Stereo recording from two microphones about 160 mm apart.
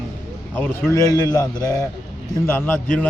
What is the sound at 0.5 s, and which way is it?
Speech, 15° left (ahead or behind).